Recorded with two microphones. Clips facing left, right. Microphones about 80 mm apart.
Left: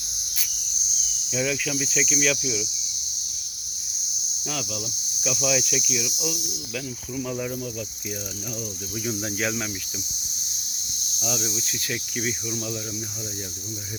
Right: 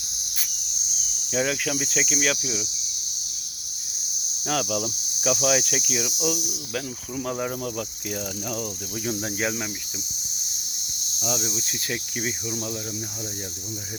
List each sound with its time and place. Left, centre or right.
1.3 s cricket: right
4.4 s cricket: right
5.3 s cricket: right
7.5 s cricket: right
11.2 s cricket: right